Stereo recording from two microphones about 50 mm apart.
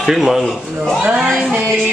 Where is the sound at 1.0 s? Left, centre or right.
Centre.